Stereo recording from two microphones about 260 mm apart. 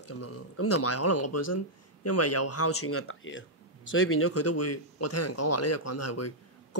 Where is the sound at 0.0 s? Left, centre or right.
Left.